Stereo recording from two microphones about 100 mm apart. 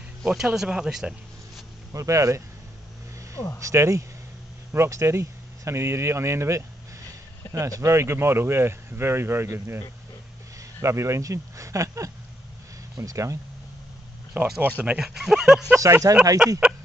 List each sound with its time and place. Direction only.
0.2 s speech: 5° right (ahead or behind)
1.9 s speech: 30° right (ahead or behind)
3.5 s speech: 30° right (ahead or behind)
14.3 s speech: 15° right (ahead or behind)
15.0 s speech: 5° right (ahead or behind)
15.7 s speech: 30° right (ahead or behind)